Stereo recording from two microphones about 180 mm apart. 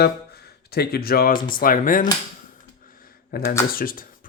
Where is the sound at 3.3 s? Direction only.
60° left (ahead or behind).